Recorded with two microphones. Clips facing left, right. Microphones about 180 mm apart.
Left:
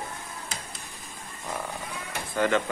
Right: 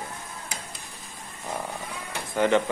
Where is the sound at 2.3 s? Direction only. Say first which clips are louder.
Right 3 dB; 15° right (ahead or behind).